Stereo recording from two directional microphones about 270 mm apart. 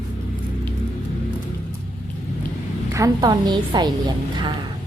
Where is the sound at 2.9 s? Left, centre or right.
Centre.